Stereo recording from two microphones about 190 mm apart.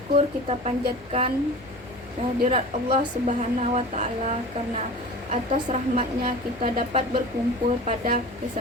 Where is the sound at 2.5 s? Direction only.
40° right (ahead or behind).